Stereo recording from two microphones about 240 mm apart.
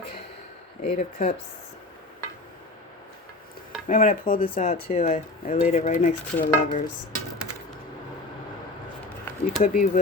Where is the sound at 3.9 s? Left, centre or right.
Left.